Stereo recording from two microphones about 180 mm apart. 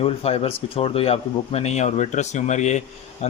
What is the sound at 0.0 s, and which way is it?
Speech, 35° left (ahead or behind).